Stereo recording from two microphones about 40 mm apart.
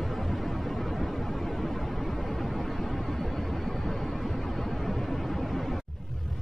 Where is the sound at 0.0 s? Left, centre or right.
Centre.